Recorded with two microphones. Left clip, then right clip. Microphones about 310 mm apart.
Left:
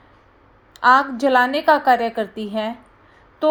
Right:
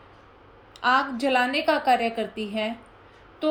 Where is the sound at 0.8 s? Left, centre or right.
Left.